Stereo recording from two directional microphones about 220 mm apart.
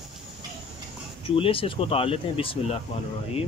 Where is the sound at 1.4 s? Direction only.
25° left (ahead or behind).